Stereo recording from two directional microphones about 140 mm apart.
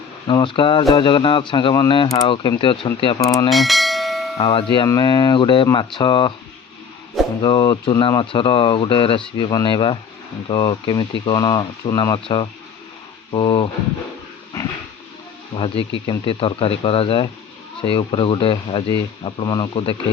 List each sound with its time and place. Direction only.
0.3 s speech: 35° left (ahead or behind)
3.2 s speech: 25° left (ahead or behind)
3.5 s bell: centre (ahead or behind)
4.4 s speech: 40° left (ahead or behind)
7.4 s speech: 30° left (ahead or behind)
15.5 s speech: 40° left (ahead or behind)